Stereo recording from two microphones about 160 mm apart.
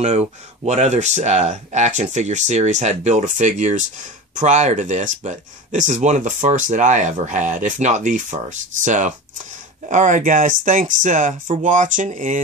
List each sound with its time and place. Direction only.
0.0 s speech: 45° right (ahead or behind)